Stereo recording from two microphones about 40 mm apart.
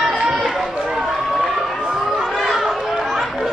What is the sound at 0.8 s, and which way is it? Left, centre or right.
Run, centre.